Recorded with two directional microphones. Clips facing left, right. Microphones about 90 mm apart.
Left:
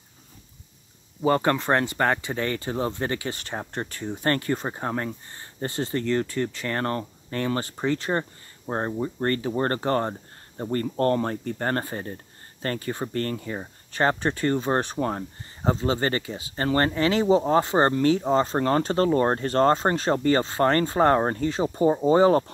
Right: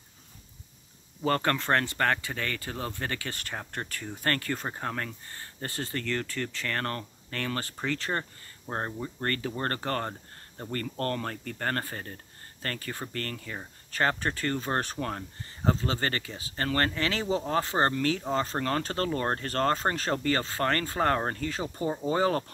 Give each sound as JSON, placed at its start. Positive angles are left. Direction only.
{"t": 1.2, "sound": "speech", "side_deg": 15}